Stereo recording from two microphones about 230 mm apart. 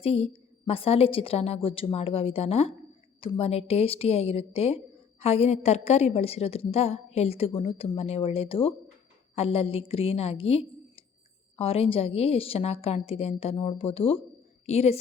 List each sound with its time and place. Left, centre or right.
0.0 s a woman's voice: left